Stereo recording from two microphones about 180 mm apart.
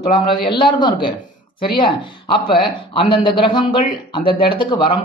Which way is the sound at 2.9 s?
30° left (ahead or behind).